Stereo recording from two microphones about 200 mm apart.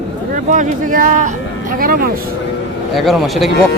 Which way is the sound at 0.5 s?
40° right (ahead or behind).